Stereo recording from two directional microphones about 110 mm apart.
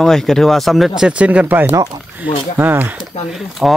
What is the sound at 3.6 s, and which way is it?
Speech, 5° right (ahead or behind).